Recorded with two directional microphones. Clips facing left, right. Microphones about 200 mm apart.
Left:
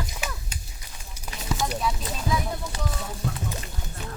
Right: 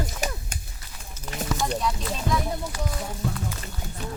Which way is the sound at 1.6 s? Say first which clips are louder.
Even; 5° left (ahead or behind).